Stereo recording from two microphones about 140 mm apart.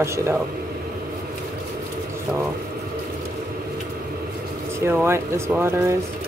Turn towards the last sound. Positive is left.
turn(degrees=-15)  # may be behind; listen again after turning